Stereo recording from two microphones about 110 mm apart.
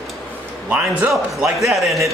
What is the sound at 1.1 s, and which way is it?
A man's voice, centre (ahead or behind).